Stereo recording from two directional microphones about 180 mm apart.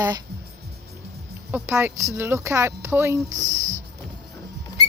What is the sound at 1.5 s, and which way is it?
Speech, 15° right (ahead or behind).